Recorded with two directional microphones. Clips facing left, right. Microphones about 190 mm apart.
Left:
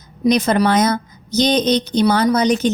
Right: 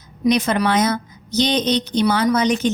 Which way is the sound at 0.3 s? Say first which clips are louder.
Left 3 dB; 40° left (ahead or behind).